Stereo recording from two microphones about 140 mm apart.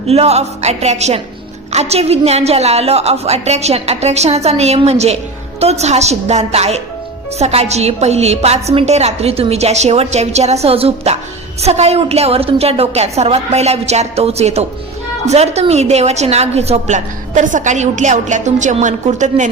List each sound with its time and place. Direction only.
0.1 s a woman's voice: 50° right (ahead or behind)